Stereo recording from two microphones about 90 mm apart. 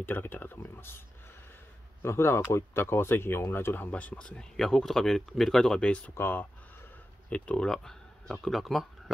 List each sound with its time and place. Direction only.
0.0 s speech: 20° left (ahead or behind)
2.0 s speech: 30° left (ahead or behind); by 6.1 s 10° left (ahead or behind)
6.1 s speech: 25° left (ahead or behind)
7.2 s speech: 15° left (ahead or behind)